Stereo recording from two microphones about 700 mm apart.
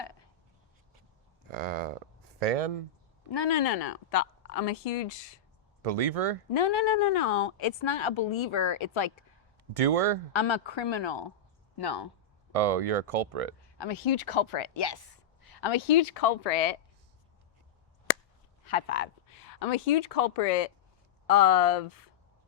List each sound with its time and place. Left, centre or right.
0.0 s a sound: left
1.5 s a sound: right
3.3 s speech: left
3.6 s speech: left
5.8 s speech: right
6.5 s speech: left
9.7 s speech: right
10.3 s speech: left
12.5 s speech: right
13.6 s speech: left
16.0 s speech: left
18.6 s speech: left